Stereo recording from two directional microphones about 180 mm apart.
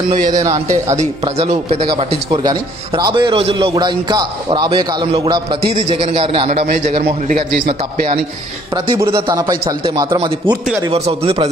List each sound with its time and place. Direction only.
0.3 s a man's voice: 20° right (ahead or behind)
0.9 s speech: 35° right (ahead or behind)
2.3 s a man's voice: 25° right (ahead or behind)
7.0 s a man's voice: 60° right (ahead or behind)
8.7 s a man's voice: 20° right (ahead or behind)